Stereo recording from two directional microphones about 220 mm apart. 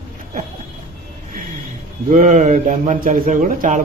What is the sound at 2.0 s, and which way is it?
A man's voice, 35° right (ahead or behind).